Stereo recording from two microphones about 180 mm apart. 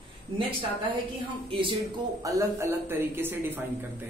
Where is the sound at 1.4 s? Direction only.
30° right (ahead or behind).